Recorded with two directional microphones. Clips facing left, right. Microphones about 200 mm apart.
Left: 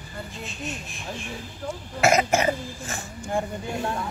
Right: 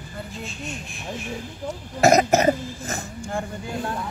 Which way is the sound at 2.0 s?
40° right (ahead or behind).